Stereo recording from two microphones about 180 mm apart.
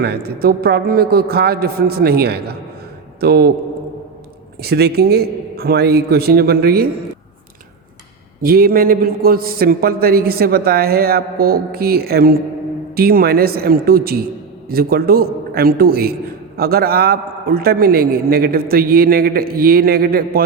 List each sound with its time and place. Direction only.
0.0 s a man's voice: 60° right (ahead or behind)
4.6 s a man's voice: 60° right (ahead or behind)
8.4 s a man's voice: 55° right (ahead or behind)